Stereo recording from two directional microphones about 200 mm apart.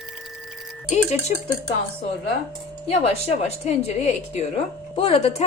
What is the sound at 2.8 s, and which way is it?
Speech, 30° left (ahead or behind).